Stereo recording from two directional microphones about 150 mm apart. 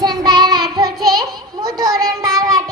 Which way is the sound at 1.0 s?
25° right (ahead or behind).